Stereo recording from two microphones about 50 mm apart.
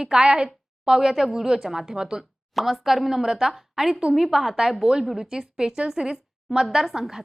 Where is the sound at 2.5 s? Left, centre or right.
Centre.